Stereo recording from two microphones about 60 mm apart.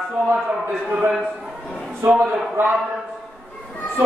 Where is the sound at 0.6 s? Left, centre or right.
Right.